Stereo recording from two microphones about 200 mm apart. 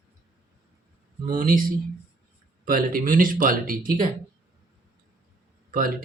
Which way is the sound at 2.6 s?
45° right (ahead or behind).